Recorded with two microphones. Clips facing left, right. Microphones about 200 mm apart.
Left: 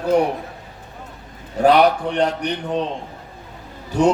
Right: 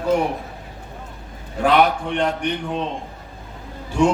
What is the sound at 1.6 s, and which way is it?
A man's voice, 40° left (ahead or behind).